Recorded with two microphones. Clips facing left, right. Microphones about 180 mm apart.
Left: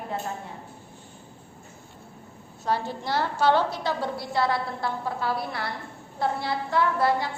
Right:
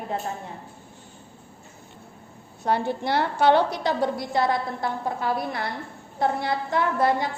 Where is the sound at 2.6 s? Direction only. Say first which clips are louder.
Right 4 dB; 60° right (ahead or behind).